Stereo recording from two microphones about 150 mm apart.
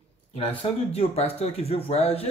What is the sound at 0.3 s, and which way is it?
Speech, 40° left (ahead or behind).